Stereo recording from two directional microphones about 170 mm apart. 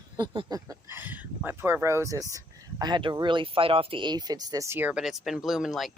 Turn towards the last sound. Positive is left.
turn(degrees=0)  # may be behind; listen again after turning